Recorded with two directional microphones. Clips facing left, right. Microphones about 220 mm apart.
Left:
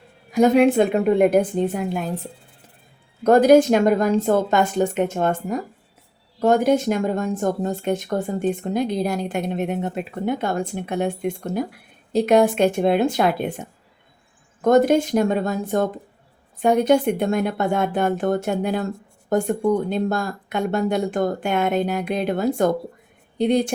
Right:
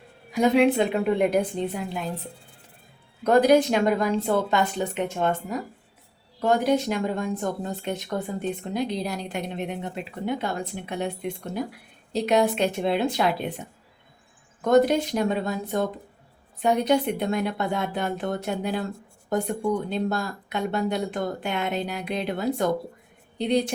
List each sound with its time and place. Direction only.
0.3 s speech: 45° left (ahead or behind)
3.2 s speech: 45° left (ahead or behind)